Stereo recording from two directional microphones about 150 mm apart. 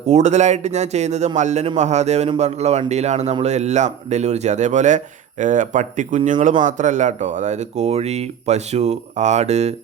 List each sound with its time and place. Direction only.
0.1 s speech: 50° right (ahead or behind)